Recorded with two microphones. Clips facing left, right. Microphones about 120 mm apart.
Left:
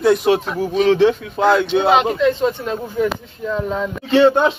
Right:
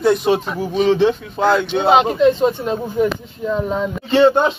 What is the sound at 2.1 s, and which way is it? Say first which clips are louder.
Speech: right 3 dB; 20° right (ahead or behind).